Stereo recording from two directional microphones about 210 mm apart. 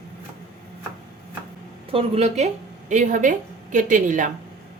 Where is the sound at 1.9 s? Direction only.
30° right (ahead or behind).